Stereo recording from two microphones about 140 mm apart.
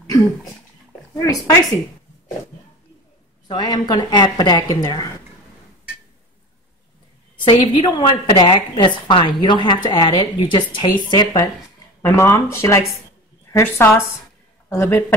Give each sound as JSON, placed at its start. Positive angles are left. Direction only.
{"t": 1.1, "sound": "speech", "side_deg": 25}
{"t": 3.4, "sound": "a woman's voice", "side_deg": 30}
{"t": 7.4, "sound": "a woman's voice", "side_deg": 35}
{"t": 12.0, "sound": "a man's voice", "side_deg": 20}